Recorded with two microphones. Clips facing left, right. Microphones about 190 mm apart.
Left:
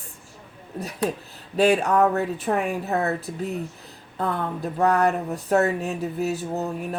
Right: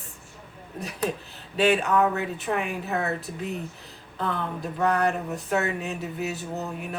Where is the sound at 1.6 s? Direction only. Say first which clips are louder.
Left 3 dB; 40° left (ahead or behind).